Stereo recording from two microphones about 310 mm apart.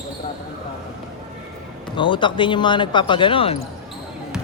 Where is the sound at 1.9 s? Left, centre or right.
Centre.